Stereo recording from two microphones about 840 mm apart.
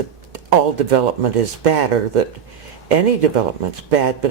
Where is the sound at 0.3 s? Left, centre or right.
Right.